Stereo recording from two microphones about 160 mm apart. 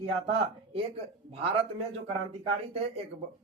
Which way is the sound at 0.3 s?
35° right (ahead or behind).